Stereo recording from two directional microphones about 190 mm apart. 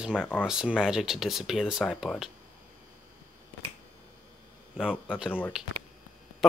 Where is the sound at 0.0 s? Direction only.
5° right (ahead or behind).